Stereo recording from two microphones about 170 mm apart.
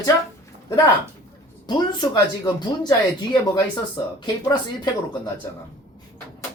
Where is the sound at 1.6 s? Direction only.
25° left (ahead or behind).